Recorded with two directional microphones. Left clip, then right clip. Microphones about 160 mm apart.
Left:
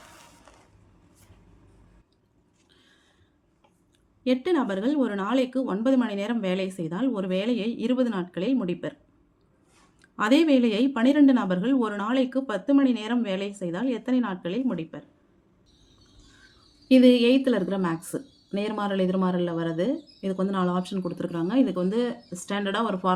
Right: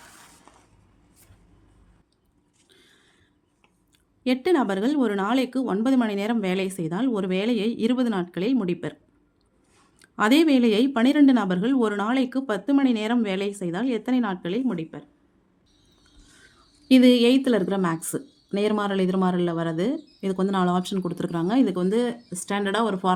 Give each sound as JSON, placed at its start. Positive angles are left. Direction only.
{"t": 4.2, "sound": "a woman's voice", "side_deg": -40}
{"t": 10.0, "sound": "a woman's voice", "side_deg": -40}
{"t": 16.9, "sound": "a woman's voice", "side_deg": -50}